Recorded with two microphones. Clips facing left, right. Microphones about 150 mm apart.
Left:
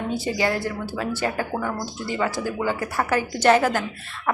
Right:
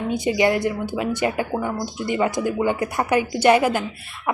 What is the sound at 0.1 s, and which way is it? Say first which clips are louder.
Speech: right 6 dB; 15° right (ahead or behind).